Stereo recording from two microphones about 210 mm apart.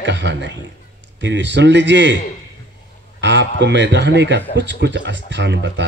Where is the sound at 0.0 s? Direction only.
55° right (ahead or behind).